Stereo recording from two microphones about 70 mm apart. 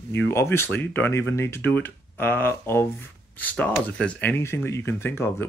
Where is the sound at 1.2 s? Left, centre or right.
Left.